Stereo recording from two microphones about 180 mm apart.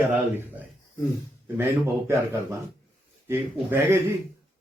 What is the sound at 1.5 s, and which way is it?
A man's voice, 15° right (ahead or behind).